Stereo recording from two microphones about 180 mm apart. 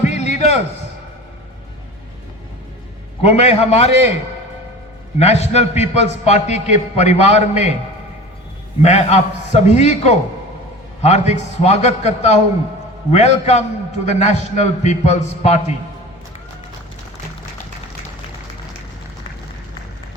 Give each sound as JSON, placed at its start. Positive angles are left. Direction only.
{"t": 0.0, "sound": "a sound", "side_deg": 40}
{"t": 3.2, "sound": "a man's voice", "side_deg": 35}
{"t": 5.1, "sound": "a man's voice", "side_deg": 35}
{"t": 8.8, "sound": "a man's voice", "side_deg": 40}